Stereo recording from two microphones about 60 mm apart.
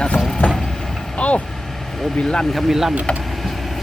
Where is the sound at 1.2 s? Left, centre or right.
Left.